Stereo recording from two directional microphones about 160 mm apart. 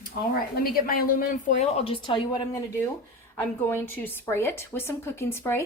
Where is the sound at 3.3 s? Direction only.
10° left (ahead or behind).